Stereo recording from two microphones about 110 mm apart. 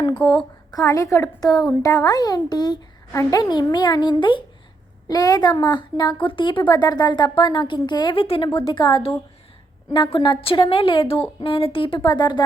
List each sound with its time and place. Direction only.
0.3 s speech: 45° left (ahead or behind)
0.8 s a woman's voice: 30° left (ahead or behind)
3.1 s a woman's voice: 30° left (ahead or behind); by 4.4 s 45° left (ahead or behind)
5.0 s a woman's voice: 35° left (ahead or behind); by 8.4 s 55° left (ahead or behind)
8.6 s a woman's voice: 45° left (ahead or behind)
12.0 s a woman's voice: 40° left (ahead or behind)